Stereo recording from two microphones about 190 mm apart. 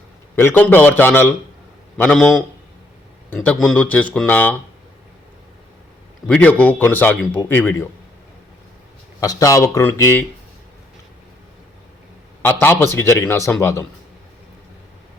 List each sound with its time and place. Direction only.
0.3 s a man's voice: 10° left (ahead or behind)
6.2 s a man's voice: 5° left (ahead or behind)
9.2 s a man's voice: 20° left (ahead or behind)
12.4 s a man's voice: 10° left (ahead or behind)